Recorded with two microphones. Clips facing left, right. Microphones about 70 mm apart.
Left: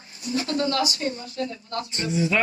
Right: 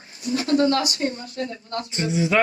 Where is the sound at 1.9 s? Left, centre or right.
Right.